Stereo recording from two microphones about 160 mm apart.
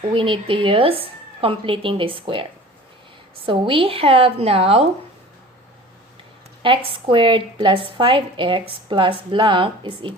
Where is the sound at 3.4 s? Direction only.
35° right (ahead or behind).